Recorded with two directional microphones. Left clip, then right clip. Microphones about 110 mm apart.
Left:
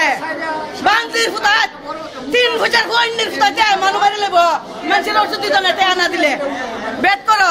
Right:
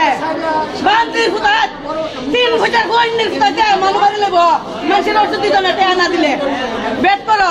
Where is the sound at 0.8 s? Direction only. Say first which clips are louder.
Right 1 dB; 45° left (ahead or behind).